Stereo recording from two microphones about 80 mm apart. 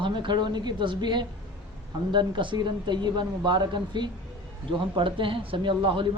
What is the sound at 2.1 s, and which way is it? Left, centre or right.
Speech, right.